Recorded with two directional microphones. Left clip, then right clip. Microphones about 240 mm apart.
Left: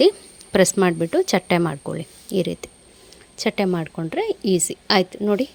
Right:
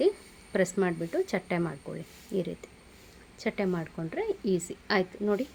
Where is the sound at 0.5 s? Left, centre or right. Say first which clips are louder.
Left 10 dB; left.